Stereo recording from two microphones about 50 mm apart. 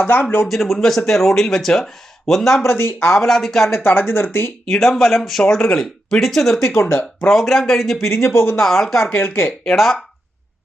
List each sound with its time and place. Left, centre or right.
0.0 s speech: left
0.4 s speech: centre
2.6 s speech: left
3.2 s speech: centre
3.8 s speech: left
4.6 s speech: centre
6.7 s speech: left
7.3 s speech: centre
8.1 s speech: left
8.5 s speech: centre
9.1 s speech: left
9.7 s speech: centre